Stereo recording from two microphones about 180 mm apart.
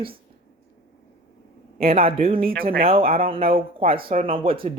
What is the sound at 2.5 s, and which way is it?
Speech, 55° right (ahead or behind).